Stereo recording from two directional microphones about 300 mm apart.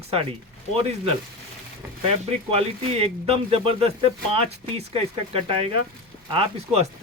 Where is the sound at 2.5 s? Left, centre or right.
Centre.